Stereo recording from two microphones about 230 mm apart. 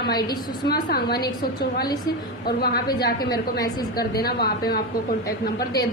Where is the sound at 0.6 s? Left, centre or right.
Left.